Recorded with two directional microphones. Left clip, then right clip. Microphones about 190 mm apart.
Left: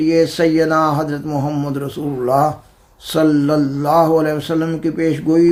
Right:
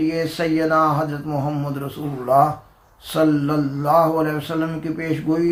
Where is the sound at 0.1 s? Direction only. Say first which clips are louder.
Left 8 dB; 50° left (ahead or behind).